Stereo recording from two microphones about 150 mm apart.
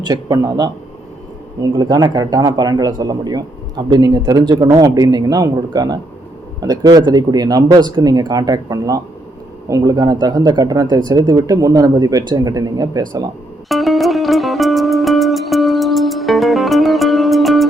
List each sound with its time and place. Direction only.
0.0 s speech: 25° right (ahead or behind)
1.7 s speech: 25° right (ahead or behind)
13.7 s music: centre (ahead or behind)